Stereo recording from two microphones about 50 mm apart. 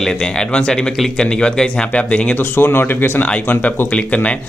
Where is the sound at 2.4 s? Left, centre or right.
Left.